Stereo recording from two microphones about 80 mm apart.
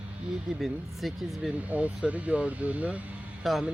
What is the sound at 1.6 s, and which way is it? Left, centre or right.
Speech, centre.